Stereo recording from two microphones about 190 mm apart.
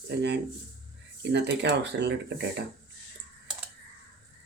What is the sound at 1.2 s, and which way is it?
A man's voice, 65° right (ahead or behind).